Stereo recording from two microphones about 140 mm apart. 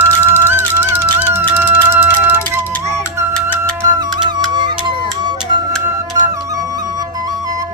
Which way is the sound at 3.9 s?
30° right (ahead or behind).